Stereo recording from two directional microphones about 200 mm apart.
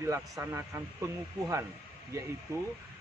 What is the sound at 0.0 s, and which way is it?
Speech, 15° right (ahead or behind).